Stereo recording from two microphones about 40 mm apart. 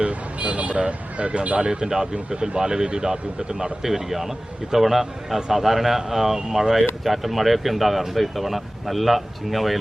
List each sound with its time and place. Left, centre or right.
0.0 s speech: right; by 9.7 s centre